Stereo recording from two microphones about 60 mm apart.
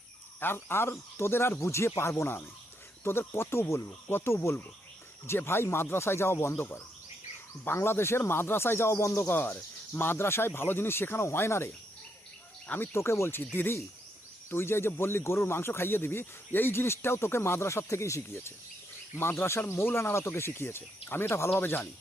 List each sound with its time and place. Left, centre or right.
0.3 s speech: left
7.8 s speech: left
12.6 s speech: left
12.9 s speech: left